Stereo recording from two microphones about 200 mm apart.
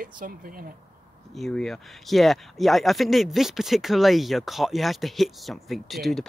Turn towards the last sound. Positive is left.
turn(degrees=0)  # may be behind; listen again after turning